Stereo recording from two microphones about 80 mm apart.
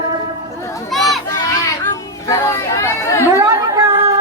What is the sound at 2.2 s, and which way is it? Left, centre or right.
Chatter, left.